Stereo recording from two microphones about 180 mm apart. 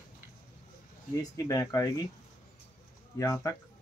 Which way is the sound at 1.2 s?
20° left (ahead or behind).